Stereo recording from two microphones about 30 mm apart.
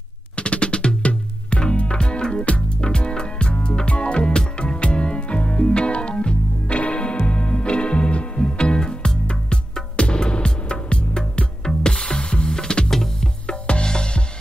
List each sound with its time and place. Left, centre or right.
0.4 s music: left; by 13.3 s centre
13.8 s music: left